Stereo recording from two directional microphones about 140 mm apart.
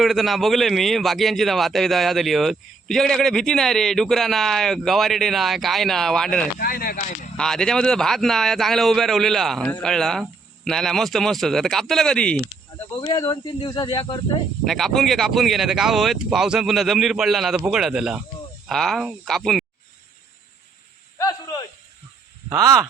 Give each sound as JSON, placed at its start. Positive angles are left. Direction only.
{"t": 0.0, "sound": "a man's voice", "side_deg": 0}
{"t": 6.6, "sound": "speech", "side_deg": 90}
{"t": 7.3, "sound": "a man's voice", "side_deg": 5}
{"t": 13.1, "sound": "speech", "side_deg": 25}
{"t": 14.6, "sound": "a man's voice", "side_deg": 0}
{"t": 21.2, "sound": "snake", "side_deg": 25}
{"t": 22.4, "sound": "speech", "side_deg": -25}